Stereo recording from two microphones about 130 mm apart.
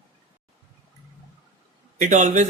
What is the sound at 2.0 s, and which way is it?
Speech, 75° right (ahead or behind).